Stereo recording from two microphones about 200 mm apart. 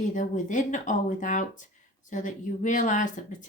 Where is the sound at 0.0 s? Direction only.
40° left (ahead or behind).